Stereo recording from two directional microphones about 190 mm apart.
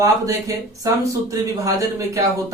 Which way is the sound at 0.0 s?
15° right (ahead or behind).